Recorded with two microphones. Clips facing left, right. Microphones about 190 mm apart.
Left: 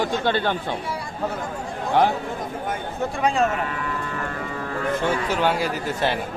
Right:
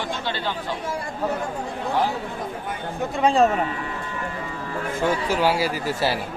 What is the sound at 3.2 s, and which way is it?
Speech, 30° right (ahead or behind).